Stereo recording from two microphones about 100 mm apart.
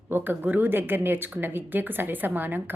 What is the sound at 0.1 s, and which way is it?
A woman's voice, 20° right (ahead or behind).